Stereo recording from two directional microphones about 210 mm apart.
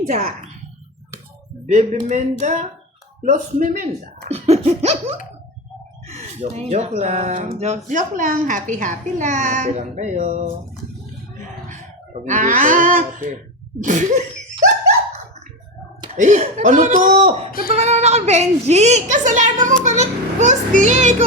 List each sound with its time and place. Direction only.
0.1 s speech: 35° right (ahead or behind)
1.6 s a woman's voice: 35° right (ahead or behind)
6.1 s a woman's voice: 30° right (ahead or behind)
12.2 s a woman's voice: 35° right (ahead or behind)
16.1 s a woman's voice: 35° right (ahead or behind)